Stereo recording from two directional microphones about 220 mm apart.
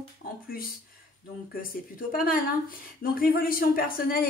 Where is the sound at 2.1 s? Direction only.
40° left (ahead or behind).